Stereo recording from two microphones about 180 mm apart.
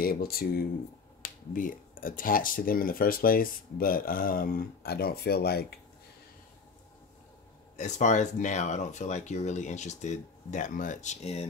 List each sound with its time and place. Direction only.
0.0 s speech: 55° left (ahead or behind)
7.7 s speech: 40° left (ahead or behind)